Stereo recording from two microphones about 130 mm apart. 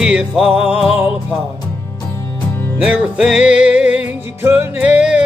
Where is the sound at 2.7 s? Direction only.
10° right (ahead or behind).